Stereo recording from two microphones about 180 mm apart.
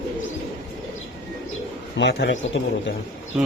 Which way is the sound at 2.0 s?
75° left (ahead or behind).